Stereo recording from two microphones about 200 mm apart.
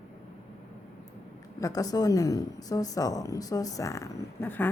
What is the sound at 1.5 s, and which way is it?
Speech, 15° left (ahead or behind).